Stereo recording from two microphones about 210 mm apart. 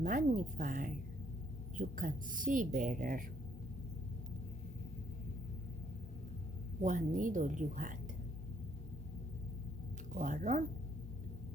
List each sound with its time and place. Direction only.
0.0 s speech: 40° right (ahead or behind)
6.8 s speech: 35° right (ahead or behind)
10.2 s speech: 40° right (ahead or behind)